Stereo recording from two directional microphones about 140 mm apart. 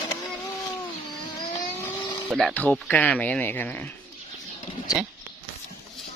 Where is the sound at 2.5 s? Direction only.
10° left (ahead or behind).